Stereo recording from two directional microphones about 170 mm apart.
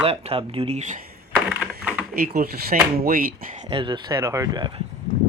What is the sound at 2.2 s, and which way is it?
Speech, 65° right (ahead or behind).